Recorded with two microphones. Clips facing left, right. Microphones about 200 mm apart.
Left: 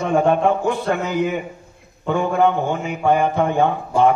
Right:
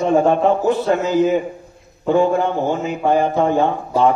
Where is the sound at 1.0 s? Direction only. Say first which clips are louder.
Right 7 dB; 60° left (ahead or behind).